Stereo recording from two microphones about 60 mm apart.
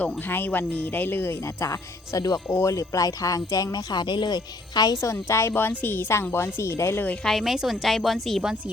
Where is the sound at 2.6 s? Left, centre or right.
Left.